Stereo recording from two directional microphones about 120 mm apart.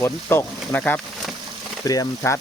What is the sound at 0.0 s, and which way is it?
Speech, 20° left (ahead or behind).